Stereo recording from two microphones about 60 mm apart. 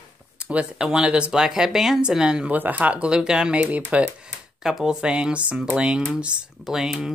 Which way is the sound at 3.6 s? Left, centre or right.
Right.